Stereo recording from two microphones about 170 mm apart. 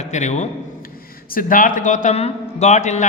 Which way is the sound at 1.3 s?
55° left (ahead or behind).